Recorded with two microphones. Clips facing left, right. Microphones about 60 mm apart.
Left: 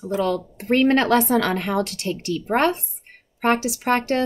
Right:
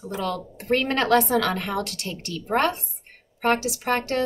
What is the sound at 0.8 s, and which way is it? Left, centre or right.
A woman's voice, left.